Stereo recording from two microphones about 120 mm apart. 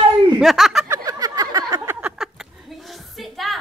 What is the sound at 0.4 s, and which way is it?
Chuckle, centre (ahead or behind).